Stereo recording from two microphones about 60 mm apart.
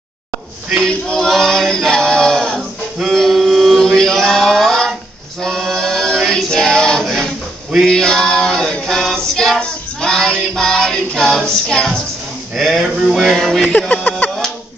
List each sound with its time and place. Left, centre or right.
0.8 s chant: centre
5.4 s choir: centre
7.8 s male singing: centre
12.5 s speech: centre
12.8 s a sound: centre
13.4 s speech: centre
13.7 s a sound: left